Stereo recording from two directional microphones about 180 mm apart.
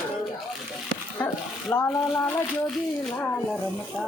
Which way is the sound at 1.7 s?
10° left (ahead or behind).